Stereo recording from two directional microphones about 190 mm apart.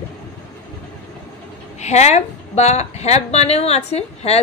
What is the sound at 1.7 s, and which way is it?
A woman's voice, 35° left (ahead or behind).